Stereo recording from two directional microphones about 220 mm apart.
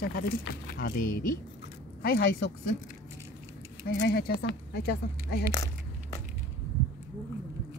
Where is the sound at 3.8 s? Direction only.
45° left (ahead or behind).